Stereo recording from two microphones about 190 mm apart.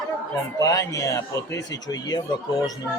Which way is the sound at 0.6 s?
15° left (ahead or behind).